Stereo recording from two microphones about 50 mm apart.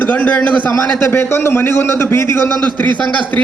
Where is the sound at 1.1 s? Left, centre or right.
Left.